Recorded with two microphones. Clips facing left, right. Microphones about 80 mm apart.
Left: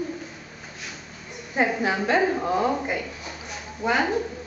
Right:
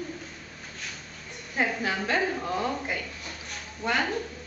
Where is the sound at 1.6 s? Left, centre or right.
Centre.